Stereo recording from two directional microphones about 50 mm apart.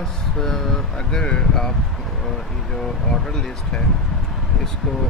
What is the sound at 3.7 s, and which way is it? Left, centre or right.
Speech, centre.